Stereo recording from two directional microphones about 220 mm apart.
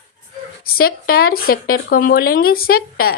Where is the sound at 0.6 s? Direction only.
40° left (ahead or behind).